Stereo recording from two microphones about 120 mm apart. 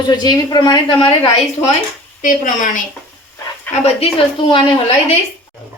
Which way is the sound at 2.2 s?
90° left.